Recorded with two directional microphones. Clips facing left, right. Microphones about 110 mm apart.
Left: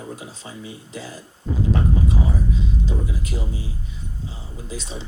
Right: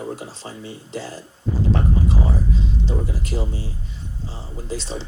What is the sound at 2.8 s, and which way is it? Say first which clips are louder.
Speech: right 2 dB; 35° right (ahead or behind).